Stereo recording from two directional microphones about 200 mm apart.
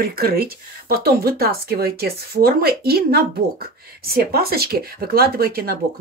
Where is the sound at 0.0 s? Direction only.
50° right (ahead or behind).